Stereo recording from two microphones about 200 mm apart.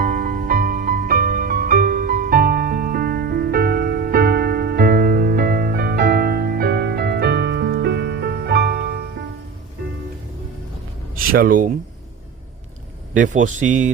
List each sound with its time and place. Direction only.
0.0 s music: 40° right (ahead or behind)
11.3 s speech: 45° right (ahead or behind)
13.1 s speech: 40° right (ahead or behind)